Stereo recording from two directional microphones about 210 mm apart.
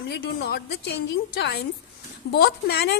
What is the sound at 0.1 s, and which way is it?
A woman's voice, 50° left (ahead or behind).